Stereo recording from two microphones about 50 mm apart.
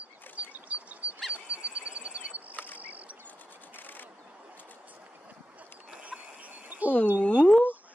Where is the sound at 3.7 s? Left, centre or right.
Left.